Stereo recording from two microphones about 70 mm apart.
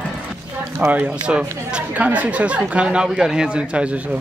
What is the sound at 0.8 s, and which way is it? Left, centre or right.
Speech, right.